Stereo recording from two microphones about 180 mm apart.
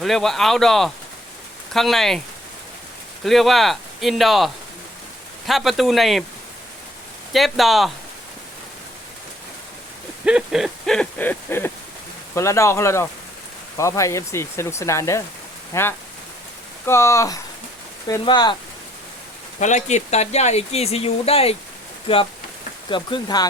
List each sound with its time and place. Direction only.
0.0 s speech: centre (ahead or behind)
3.2 s speech: centre (ahead or behind)
7.3 s speech: centre (ahead or behind)
10.2 s hoot: 5° right (ahead or behind); by 11.7 s 10° left (ahead or behind)
12.3 s speech: 15° left (ahead or behind)
19.5 s speech: 40° left (ahead or behind); by 23.5 s 25° left (ahead or behind)